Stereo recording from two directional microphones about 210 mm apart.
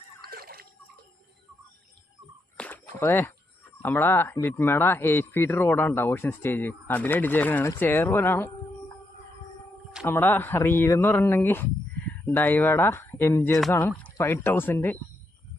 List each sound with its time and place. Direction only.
0.2 s water: 45° right (ahead or behind)
2.6 s a sound: 10° left (ahead or behind)
3.0 s a man's voice: 10° left (ahead or behind)
10.1 s a man's voice: 10° left (ahead or behind)